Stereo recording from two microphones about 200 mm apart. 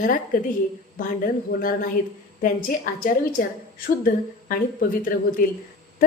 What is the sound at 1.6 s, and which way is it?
A woman's voice, 45° left (ahead or behind).